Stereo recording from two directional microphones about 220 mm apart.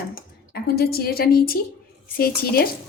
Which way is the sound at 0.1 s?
45° left (ahead or behind).